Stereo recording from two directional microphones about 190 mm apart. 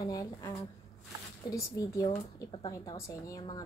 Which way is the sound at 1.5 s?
20° left (ahead or behind).